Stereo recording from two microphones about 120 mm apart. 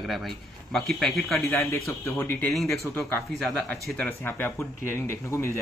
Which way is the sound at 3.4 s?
5° left (ahead or behind).